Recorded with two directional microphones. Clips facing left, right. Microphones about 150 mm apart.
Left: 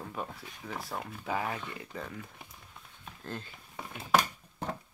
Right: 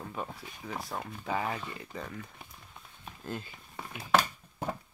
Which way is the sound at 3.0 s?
10° right (ahead or behind).